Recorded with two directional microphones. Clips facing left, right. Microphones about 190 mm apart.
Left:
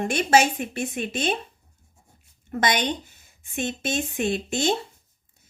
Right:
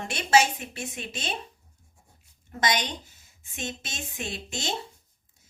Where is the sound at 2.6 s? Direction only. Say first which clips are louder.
Left 4 dB; 60° left (ahead or behind).